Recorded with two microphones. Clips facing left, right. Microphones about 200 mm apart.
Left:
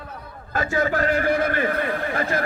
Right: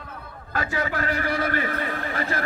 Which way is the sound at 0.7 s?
45° left (ahead or behind).